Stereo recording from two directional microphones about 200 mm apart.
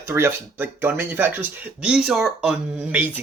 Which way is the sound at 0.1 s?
10° right (ahead or behind).